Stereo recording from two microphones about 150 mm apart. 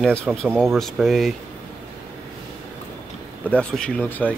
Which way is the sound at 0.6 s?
Centre (ahead or behind).